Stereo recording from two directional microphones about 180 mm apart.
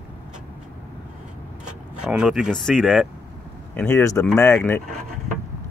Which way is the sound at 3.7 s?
15° left (ahead or behind).